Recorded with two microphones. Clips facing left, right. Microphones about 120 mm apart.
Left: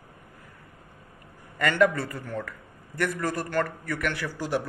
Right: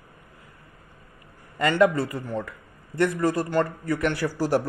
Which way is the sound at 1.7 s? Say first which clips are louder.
Right 3 dB; 20° right (ahead or behind).